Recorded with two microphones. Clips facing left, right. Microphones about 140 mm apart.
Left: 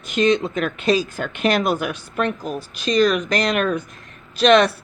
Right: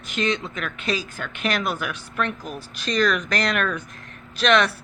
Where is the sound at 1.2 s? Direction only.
25° left (ahead or behind).